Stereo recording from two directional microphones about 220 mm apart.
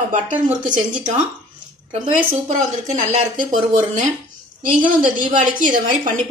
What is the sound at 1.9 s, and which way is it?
Speech, 35° right (ahead or behind).